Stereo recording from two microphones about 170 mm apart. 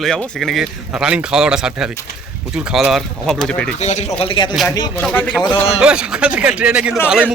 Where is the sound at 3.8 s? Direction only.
45° left (ahead or behind).